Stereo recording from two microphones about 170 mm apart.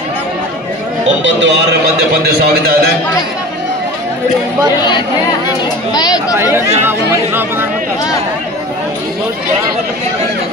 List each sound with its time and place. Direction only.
1.2 s a man's voice: 90° right
2.2 s a man's voice: 65° right (ahead or behind)
5.9 s speech: 25° left (ahead or behind)
6.8 s speech: 15° right (ahead or behind)